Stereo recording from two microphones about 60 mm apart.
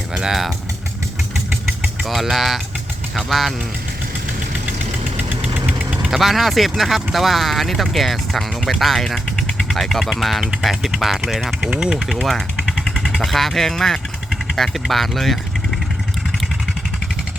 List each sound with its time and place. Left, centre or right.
0.1 s speech: centre
2.0 s speech: centre
5.1 s engine knocking: right
5.8 s vehicle: centre
6.1 s speech: centre
11.6 s speech: centre
11.9 s speech: centre